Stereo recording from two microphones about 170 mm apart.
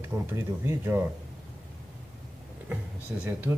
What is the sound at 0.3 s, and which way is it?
Speech, 15° right (ahead or behind).